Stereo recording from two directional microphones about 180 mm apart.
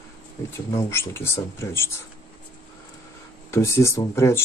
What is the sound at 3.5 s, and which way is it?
Speech, 15° left (ahead or behind).